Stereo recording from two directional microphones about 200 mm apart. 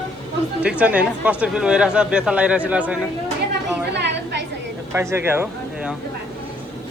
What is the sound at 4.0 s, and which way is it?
Chatter, 60° right (ahead or behind).